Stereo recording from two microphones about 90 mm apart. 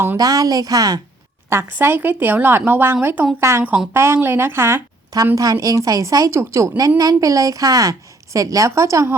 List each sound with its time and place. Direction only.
0.2 s speech: 45° right (ahead or behind)
1.5 s a woman's voice: 25° right (ahead or behind)
5.1 s a woman's voice: 40° right (ahead or behind)